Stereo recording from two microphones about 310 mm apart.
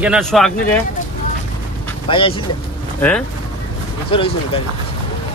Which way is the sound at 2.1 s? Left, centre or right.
Centre.